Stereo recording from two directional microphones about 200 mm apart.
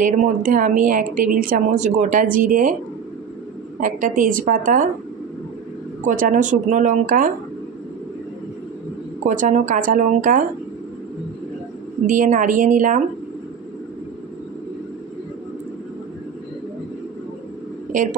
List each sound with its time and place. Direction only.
0.0 s a woman's voice: 40° right (ahead or behind)
3.8 s a woman's voice: 45° right (ahead or behind)
6.0 s a woman's voice: 40° right (ahead or behind)
9.2 s a woman's voice: 40° right (ahead or behind)
12.1 s a woman's voice: 40° right (ahead or behind)